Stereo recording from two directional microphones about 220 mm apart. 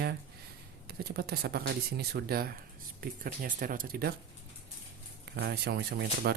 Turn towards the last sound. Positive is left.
turn(degrees=-50)  # may be behind; listen again after turning